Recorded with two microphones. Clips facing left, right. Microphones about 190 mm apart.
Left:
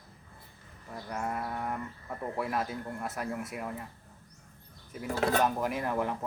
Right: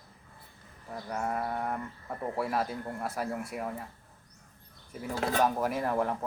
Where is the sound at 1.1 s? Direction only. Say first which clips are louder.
Right 2 dB; centre (ahead or behind).